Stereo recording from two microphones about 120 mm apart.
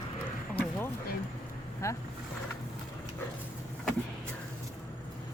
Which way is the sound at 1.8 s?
25° left (ahead or behind).